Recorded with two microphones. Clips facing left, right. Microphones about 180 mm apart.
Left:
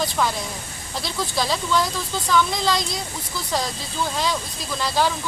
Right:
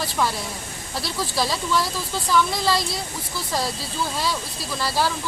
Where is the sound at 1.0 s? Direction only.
5° right (ahead or behind).